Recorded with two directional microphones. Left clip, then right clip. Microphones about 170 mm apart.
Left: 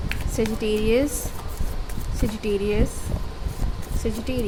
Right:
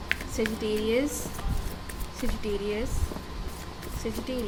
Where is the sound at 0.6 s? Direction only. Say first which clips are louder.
Left 6 dB; 40° left (ahead or behind).